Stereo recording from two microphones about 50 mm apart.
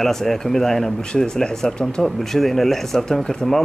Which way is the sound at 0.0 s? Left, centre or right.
Centre.